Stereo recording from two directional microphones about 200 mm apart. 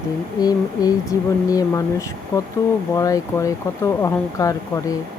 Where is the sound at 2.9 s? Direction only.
15° left (ahead or behind).